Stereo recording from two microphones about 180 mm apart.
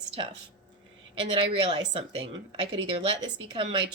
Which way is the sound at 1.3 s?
25° right (ahead or behind).